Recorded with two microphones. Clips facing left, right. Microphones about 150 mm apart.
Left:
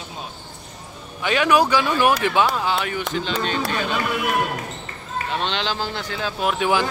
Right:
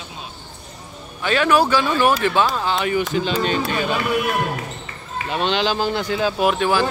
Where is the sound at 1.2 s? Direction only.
15° left (ahead or behind).